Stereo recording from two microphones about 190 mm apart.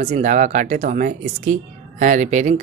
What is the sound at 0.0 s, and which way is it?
Speech, 35° right (ahead or behind).